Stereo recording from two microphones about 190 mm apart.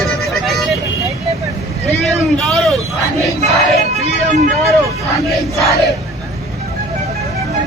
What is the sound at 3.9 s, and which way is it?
Music, 40° right (ahead or behind).